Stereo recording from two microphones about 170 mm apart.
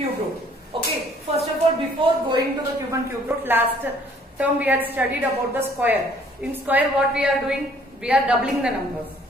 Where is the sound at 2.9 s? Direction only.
15° right (ahead or behind).